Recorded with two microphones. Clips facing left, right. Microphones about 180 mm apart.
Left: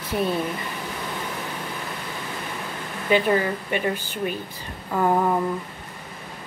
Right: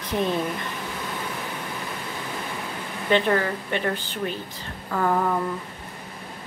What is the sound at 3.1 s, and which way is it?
A woman's voice, 10° left (ahead or behind).